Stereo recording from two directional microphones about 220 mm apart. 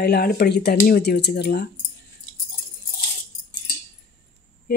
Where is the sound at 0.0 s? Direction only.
45° left (ahead or behind).